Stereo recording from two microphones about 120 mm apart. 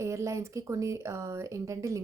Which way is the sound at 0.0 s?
25° right (ahead or behind).